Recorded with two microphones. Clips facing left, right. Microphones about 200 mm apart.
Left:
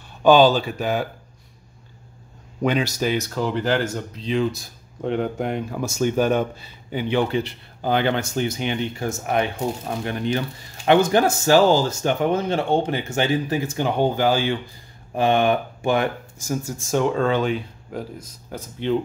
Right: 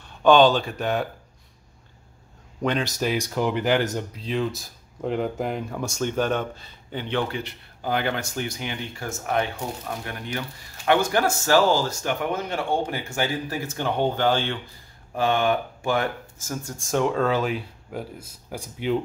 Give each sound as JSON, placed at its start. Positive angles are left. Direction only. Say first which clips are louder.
{"t": 0.2, "sound": "speech", "louder": "left 2 dB", "side_deg": 5}
{"t": 2.6, "sound": "speech", "louder": "left 3 dB", "side_deg": 5}
{"t": 3.2, "sound": "speech", "louder": "even", "side_deg": -15}
{"t": 4.2, "sound": "speech", "louder": "left 6 dB", "side_deg": 0}
{"t": 7.3, "sound": "speech", "louder": "left 8 dB", "side_deg": 30}
{"t": 16.7, "sound": "speech", "louder": "left 1 dB", "side_deg": 0}